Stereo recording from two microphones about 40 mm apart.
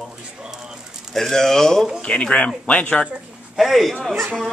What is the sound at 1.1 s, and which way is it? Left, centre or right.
Speech, centre.